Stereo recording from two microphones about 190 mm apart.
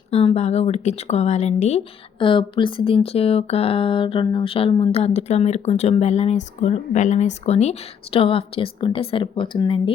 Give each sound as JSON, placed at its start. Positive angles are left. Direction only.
{"t": 0.1, "sound": "speech", "side_deg": 30}